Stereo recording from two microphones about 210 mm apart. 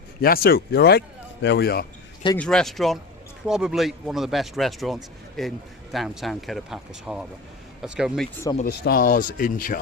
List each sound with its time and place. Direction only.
0.2 s speech: 45° left (ahead or behind)
2.4 s speech: 5° left (ahead or behind)
8.8 s speech: 45° left (ahead or behind)